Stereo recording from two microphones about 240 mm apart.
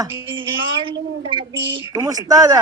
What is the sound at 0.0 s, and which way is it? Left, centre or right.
Speech, right.